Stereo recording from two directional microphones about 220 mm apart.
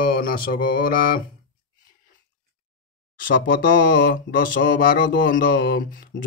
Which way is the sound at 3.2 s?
40° left (ahead or behind).